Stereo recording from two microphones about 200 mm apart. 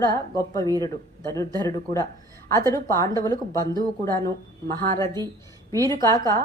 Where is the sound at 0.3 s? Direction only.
15° left (ahead or behind).